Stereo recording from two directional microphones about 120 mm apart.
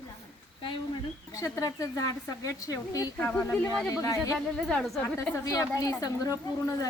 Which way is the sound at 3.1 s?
10° left (ahead or behind).